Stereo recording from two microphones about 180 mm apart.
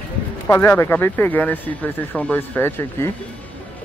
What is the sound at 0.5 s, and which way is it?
Speech, 15° left (ahead or behind).